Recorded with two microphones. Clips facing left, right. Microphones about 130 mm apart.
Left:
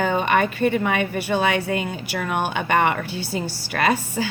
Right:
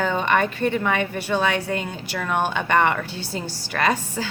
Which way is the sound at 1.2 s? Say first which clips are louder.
Left 1 dB; 60° left (ahead or behind).